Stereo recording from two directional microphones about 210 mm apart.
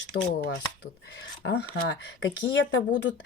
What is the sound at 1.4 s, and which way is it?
Speech, 50° left (ahead or behind).